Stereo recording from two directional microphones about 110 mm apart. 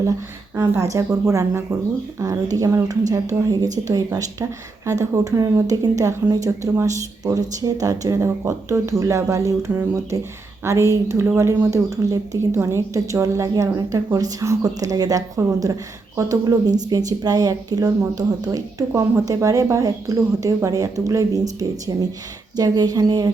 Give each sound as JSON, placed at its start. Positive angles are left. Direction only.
{"t": 0.0, "sound": "a woman's voice", "side_deg": -30}